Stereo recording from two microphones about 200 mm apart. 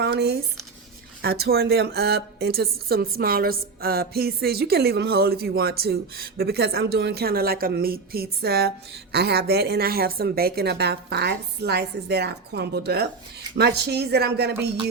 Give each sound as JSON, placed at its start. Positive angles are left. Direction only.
{"t": 0.0, "sound": "a woman's voice", "side_deg": -55}